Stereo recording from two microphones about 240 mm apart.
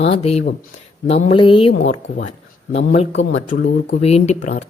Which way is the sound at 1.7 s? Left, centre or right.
Left.